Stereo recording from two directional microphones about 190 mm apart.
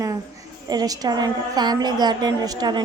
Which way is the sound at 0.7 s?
20° right (ahead or behind).